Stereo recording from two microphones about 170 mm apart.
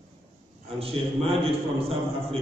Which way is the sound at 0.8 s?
35° right (ahead or behind).